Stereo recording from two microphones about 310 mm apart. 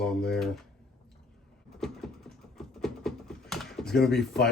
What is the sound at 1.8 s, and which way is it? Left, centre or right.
Typing, centre.